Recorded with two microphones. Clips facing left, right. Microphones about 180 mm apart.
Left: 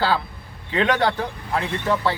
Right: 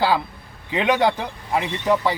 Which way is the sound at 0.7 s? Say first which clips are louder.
Right 1 dB; 15° right (ahead or behind).